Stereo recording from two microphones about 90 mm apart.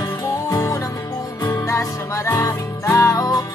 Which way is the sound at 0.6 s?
30° left (ahead or behind).